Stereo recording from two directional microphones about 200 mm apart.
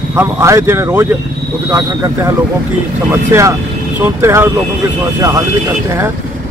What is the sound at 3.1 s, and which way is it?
Speech, 15° right (ahead or behind).